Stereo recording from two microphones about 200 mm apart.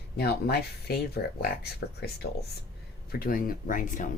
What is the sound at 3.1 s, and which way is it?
Speech, 45° left (ahead or behind).